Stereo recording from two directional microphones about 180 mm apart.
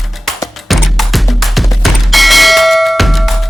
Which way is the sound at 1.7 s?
Centre (ahead or behind).